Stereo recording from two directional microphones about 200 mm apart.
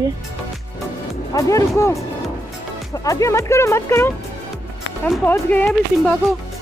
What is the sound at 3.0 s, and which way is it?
Speech, 15° left (ahead or behind).